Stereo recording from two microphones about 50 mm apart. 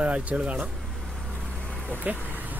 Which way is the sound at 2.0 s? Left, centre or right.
Right.